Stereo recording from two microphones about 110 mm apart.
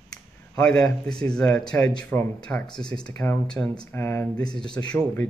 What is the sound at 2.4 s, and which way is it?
Speech, 5° left (ahead or behind).